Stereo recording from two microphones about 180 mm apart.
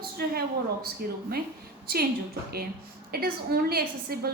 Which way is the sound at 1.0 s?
55° right (ahead or behind).